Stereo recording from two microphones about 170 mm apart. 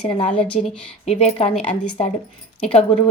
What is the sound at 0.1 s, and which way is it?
Speech, 35° left (ahead or behind).